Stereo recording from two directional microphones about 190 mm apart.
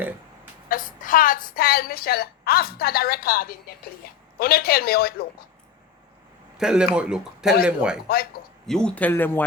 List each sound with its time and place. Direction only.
0.7 s a woman's voice: 45° left (ahead or behind)
6.6 s speech: 5° right (ahead or behind)
8.0 s a woman's voice: 50° left (ahead or behind)
8.6 s speech: 5° left (ahead or behind)